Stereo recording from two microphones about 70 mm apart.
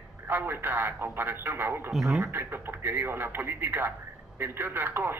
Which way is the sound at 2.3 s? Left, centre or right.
Right.